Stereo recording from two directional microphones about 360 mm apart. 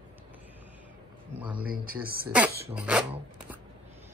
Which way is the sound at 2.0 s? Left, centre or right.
Right.